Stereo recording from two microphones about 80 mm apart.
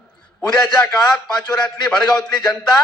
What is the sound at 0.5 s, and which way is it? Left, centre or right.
A man's voice, centre.